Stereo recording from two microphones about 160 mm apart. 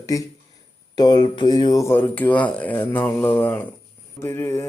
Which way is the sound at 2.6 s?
10° left (ahead or behind).